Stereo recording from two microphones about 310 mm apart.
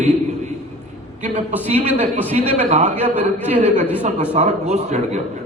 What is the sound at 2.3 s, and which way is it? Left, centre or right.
A man's voice, centre.